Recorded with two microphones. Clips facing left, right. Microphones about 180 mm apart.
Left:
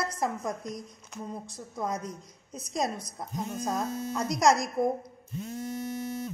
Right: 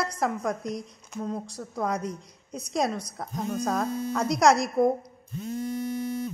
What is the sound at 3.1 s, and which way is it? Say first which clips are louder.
Speech: right 4 dB; 60° right (ahead or behind).